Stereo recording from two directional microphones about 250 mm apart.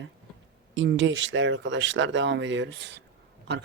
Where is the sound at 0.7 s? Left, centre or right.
Right.